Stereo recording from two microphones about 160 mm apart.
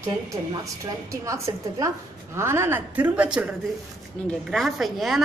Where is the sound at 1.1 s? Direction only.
20° right (ahead or behind).